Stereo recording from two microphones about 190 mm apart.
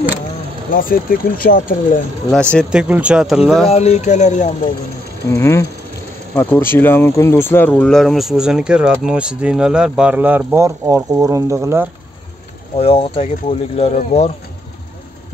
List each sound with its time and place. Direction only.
0.7 s speech: 50° left (ahead or behind)
2.3 s speech: centre (ahead or behind)
3.6 s speech: 35° left (ahead or behind)
5.3 s a sound: 15° left (ahead or behind)
6.3 s speech: 10° left (ahead or behind); by 11.9 s 15° right (ahead or behind)
12.7 s speech: 30° left (ahead or behind)